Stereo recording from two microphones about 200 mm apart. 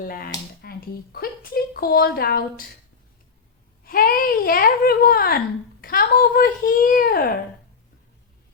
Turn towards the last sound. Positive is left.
turn(degrees=45)  # may be behind; listen again after turning